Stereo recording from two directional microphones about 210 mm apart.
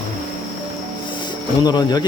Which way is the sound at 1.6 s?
20° left (ahead or behind).